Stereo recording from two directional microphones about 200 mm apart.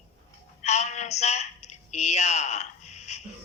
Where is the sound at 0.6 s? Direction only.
35° left (ahead or behind).